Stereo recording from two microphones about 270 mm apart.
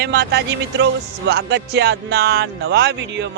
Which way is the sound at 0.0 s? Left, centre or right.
Right.